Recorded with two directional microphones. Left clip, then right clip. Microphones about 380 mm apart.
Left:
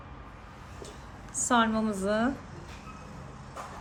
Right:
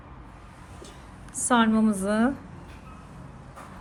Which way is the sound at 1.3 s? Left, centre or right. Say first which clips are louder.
Right 3 dB; centre.